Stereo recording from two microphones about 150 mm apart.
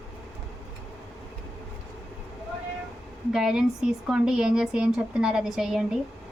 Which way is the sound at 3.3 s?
5° right (ahead or behind).